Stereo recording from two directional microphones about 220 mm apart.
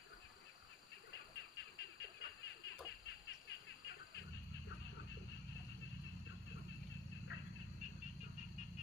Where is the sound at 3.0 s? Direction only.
55° left (ahead or behind).